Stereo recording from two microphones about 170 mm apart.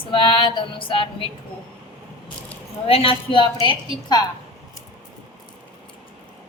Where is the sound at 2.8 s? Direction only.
35° left (ahead or behind).